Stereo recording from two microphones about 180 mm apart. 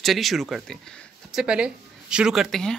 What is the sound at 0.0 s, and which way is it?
A woman's voice, centre (ahead or behind).